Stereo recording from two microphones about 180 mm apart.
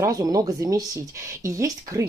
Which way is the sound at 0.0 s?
20° right (ahead or behind).